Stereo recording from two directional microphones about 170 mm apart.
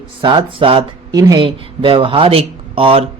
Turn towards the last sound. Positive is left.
turn(degrees=-35)  # may be behind; listen again after turning